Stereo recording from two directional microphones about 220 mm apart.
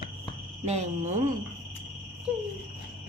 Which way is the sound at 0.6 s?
30° right (ahead or behind).